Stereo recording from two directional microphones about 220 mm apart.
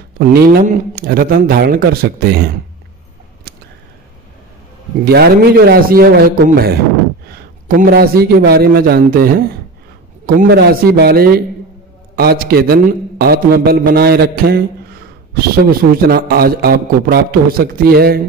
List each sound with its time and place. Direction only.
0.3 s a man's voice: 45° right (ahead or behind)
5.0 s a man's voice: 45° right (ahead or behind)